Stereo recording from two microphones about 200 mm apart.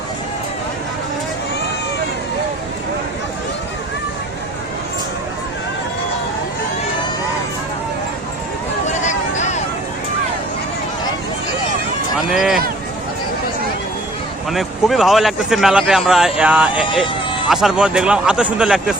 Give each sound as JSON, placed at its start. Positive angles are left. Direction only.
{"t": 8.9, "sound": "vehicle", "side_deg": 35}
{"t": 12.3, "sound": "a sound", "side_deg": 0}
{"t": 14.5, "sound": "speech", "side_deg": 0}